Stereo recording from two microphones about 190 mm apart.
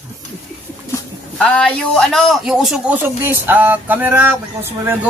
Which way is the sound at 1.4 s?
5° left (ahead or behind).